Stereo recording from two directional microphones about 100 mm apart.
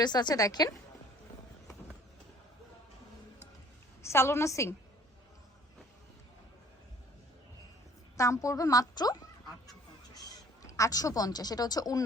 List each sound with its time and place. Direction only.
0.0 s a woman's voice: 45° left (ahead or behind)
4.0 s a woman's voice: 25° left (ahead or behind)
8.1 s speech: 35° left (ahead or behind)
10.6 s speech: 35° left (ahead or behind)